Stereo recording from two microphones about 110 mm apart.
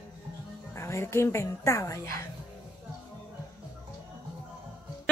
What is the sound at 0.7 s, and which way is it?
A woman's voice, 25° left (ahead or behind).